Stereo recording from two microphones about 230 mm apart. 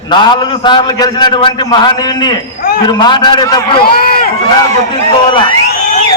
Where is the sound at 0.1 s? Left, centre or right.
Centre.